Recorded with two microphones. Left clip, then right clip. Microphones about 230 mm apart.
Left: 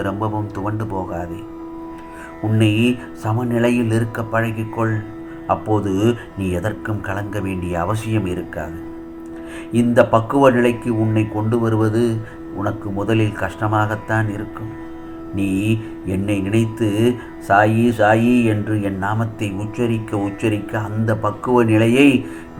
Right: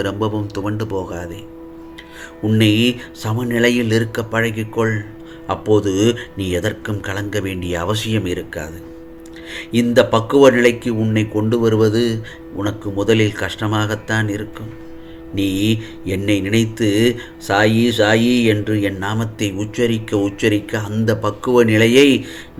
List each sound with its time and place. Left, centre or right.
0.0 s speech: right
2.5 s speech: right
9.7 s speech: right